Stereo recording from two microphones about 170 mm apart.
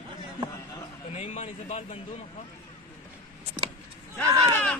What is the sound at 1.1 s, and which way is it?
Speech, 40° left (ahead or behind).